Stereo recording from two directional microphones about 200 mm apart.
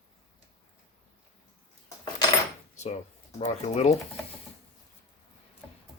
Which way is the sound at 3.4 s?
35° left (ahead or behind).